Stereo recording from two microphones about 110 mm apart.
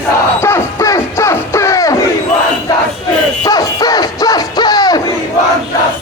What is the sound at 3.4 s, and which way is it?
Music, 35° left (ahead or behind).